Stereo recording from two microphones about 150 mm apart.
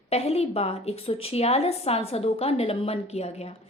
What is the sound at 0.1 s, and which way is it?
A woman's voice, 45° left (ahead or behind).